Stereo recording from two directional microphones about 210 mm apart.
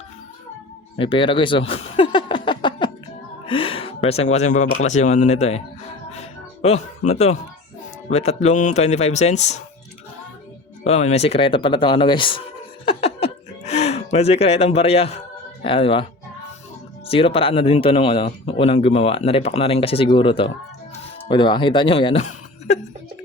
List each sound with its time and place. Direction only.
0.9 s speech: 25° left (ahead or behind)
10.8 s speech: 30° left (ahead or behind)
12.8 s chuckle: 25° left (ahead or behind)
15.6 s speech: 25° left (ahead or behind)
17.1 s speech: 25° left (ahead or behind)